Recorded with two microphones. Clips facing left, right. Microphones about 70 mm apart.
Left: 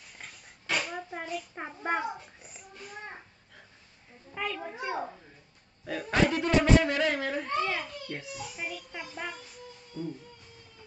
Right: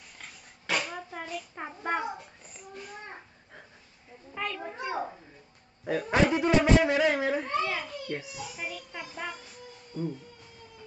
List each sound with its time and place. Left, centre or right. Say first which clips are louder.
0.2 s dog: left 1 dB; centre
1.3 s a child's voice: left 1 dB; centre
4.3 s speech: even; centre
9.9 s music: right 3 dB; right